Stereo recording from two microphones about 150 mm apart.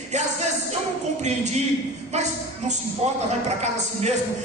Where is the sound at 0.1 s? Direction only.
50° right (ahead or behind).